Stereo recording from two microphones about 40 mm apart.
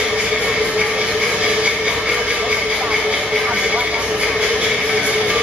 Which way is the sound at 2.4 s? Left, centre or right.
Right.